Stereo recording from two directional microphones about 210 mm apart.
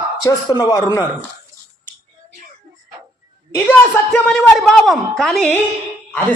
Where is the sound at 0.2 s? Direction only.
20° left (ahead or behind).